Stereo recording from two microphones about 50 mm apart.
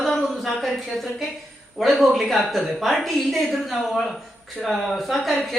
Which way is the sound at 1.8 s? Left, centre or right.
Centre.